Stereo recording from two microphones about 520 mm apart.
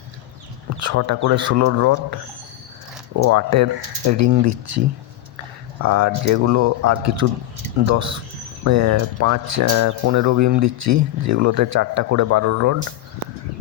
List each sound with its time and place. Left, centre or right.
0.8 s speech: right
5.8 s speech: right